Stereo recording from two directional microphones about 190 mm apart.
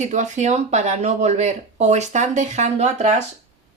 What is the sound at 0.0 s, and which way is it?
Speech, 40° right (ahead or behind).